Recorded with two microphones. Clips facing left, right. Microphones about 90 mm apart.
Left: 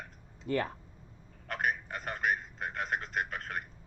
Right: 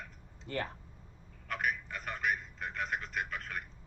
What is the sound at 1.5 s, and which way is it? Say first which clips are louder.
Telephone: left 2 dB; 45° left (ahead or behind).